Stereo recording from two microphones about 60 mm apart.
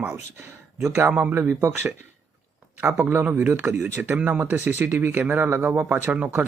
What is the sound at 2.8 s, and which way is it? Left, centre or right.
Speech, right.